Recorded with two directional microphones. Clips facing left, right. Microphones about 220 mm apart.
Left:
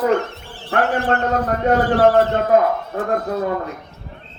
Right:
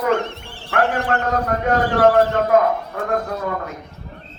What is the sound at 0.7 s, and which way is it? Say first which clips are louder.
Speech: left 1 dB; 30° left (ahead or behind).